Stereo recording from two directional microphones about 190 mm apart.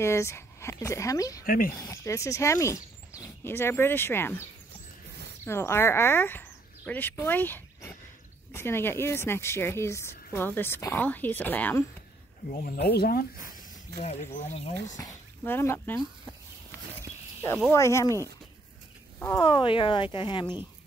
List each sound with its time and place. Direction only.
0.0 s a woman's voice: 15° left (ahead or behind)
1.4 s speech: 50° left (ahead or behind)
1.8 s a woman's voice: 15° left (ahead or behind)
5.4 s a woman's voice: 15° left (ahead or behind)
12.4 s speech: 50° left (ahead or behind)
15.0 s speech: 15° left (ahead or behind)
17.7 s a woman's voice: 15° left (ahead or behind)
19.1 s speech: 15° left (ahead or behind)